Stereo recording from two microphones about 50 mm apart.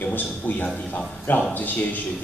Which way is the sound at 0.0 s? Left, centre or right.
Left.